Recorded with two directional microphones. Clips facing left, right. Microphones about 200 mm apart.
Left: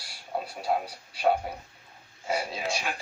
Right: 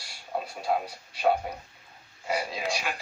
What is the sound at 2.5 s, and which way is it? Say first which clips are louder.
Speech: even; centre (ahead or behind).